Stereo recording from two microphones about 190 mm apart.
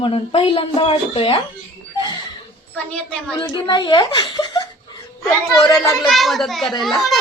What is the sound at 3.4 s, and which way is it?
A woman's voice, 25° left (ahead or behind).